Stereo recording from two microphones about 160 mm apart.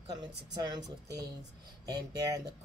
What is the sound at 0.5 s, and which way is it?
Speech, 25° right (ahead or behind).